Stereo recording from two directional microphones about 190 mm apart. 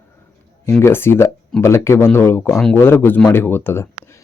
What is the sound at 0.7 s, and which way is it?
Speech, 10° left (ahead or behind).